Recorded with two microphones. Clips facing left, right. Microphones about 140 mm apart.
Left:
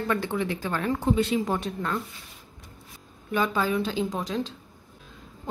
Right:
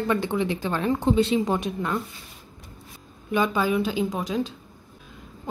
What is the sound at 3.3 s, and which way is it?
Speech, 15° right (ahead or behind).